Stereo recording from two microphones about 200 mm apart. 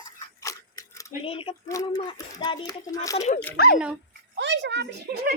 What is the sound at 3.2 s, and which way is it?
Speech, 35° left (ahead or behind).